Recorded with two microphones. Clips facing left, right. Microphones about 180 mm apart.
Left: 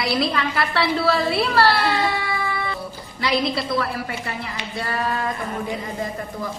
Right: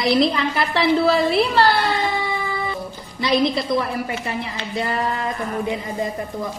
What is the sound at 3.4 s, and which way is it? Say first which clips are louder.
A woman's voice: right 3 dB; 20° right (ahead or behind).